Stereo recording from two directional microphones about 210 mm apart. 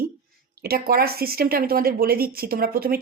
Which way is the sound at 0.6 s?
45° right (ahead or behind).